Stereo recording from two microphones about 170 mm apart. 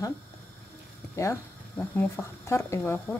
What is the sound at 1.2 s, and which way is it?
Speech, 15° left (ahead or behind).